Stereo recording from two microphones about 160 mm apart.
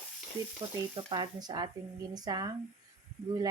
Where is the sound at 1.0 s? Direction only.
30° right (ahead or behind).